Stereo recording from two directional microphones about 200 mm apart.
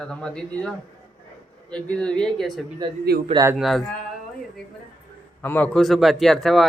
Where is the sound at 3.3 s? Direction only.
15° right (ahead or behind).